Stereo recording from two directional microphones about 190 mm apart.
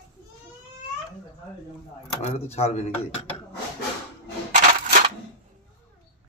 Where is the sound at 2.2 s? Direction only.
35° left (ahead or behind).